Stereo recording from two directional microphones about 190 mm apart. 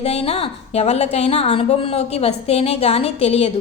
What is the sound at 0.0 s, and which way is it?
A woman's voice, 30° left (ahead or behind).